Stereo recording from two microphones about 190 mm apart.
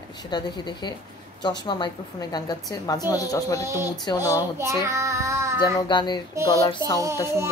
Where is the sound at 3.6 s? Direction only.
15° right (ahead or behind).